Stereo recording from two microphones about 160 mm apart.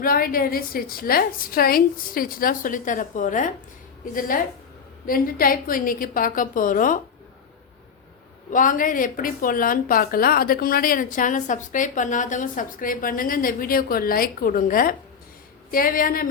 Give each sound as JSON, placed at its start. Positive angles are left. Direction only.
{"t": 0.0, "sound": "a woman's voice", "side_deg": 65}
{"t": 8.5, "sound": "a woman's voice", "side_deg": 55}